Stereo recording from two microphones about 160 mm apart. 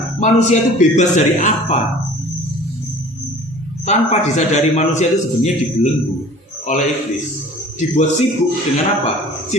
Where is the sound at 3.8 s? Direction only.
45° left (ahead or behind).